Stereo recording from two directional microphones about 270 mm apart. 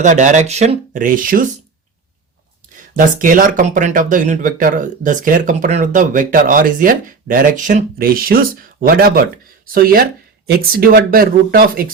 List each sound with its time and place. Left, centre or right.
0.0 s speech: right
2.9 s speech: right